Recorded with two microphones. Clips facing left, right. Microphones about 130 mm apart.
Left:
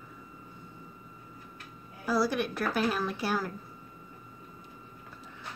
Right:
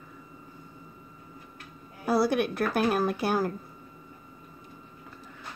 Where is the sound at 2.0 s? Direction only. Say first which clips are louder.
Right 4 dB; 60° right (ahead or behind).